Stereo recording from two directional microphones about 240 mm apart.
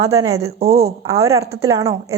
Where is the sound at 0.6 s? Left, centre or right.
Right.